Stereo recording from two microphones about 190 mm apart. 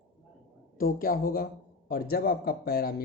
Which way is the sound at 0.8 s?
50° left (ahead or behind).